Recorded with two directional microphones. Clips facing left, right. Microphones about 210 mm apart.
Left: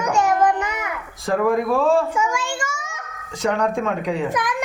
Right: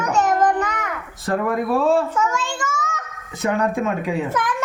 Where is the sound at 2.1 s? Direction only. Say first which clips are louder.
Even; 10° left (ahead or behind).